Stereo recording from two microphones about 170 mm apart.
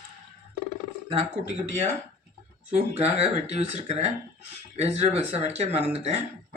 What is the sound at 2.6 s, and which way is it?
Speech, 40° right (ahead or behind).